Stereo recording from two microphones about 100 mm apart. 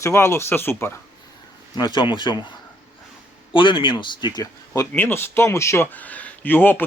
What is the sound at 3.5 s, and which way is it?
Speech, 55° left (ahead or behind).